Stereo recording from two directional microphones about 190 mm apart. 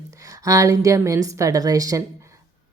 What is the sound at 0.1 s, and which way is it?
A woman's voice, 20° right (ahead or behind).